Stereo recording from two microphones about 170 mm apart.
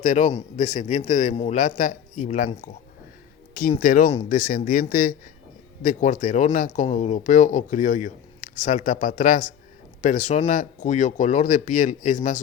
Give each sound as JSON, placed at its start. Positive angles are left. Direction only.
{"t": 0.0, "sound": "speech", "side_deg": 45}
{"t": 3.5, "sound": "speech", "side_deg": 60}